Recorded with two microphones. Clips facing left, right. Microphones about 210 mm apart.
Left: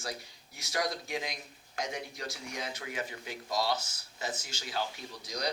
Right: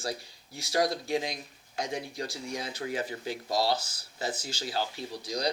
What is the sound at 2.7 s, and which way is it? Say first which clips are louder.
Speech: right 5 dB; 35° right (ahead or behind).